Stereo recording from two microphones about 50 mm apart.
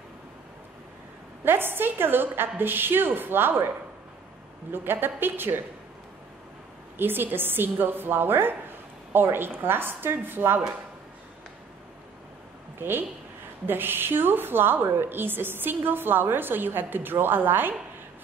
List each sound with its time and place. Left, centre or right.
1.4 s a woman's voice: right
4.7 s a woman's voice: right
7.0 s a woman's voice: right
12.7 s a woman's voice: right